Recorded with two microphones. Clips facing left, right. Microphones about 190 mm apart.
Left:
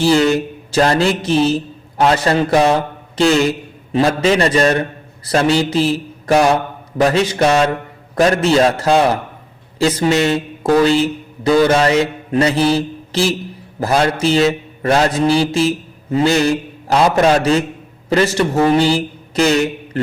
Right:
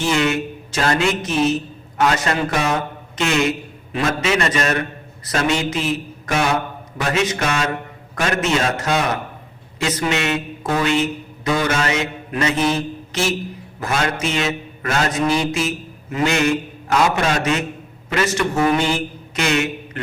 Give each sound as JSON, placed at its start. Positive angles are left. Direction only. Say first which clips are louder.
{"t": 0.0, "sound": "a man's voice", "louder": "left 6 dB", "side_deg": 35}